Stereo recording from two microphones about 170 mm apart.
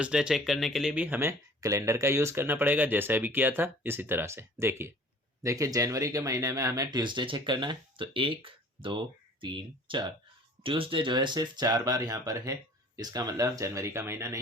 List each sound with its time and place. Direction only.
0.0 s speech: 5° right (ahead or behind)